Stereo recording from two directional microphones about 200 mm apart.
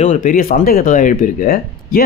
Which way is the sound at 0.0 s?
40° left (ahead or behind).